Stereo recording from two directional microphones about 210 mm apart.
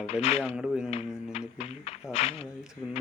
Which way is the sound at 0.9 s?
30° left (ahead or behind).